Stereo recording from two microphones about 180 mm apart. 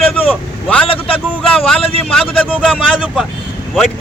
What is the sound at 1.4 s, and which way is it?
Speech, 5° left (ahead or behind).